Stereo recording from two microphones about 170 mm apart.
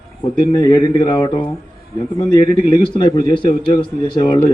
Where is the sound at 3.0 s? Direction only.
30° left (ahead or behind).